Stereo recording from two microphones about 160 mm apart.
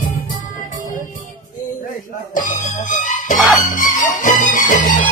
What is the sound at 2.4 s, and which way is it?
Music, 55° left (ahead or behind).